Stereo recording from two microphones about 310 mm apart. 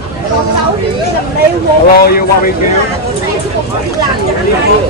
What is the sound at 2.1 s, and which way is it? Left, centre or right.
Speech, left.